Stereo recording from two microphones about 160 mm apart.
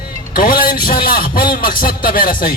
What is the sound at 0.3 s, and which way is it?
A man's voice, 65° left (ahead or behind).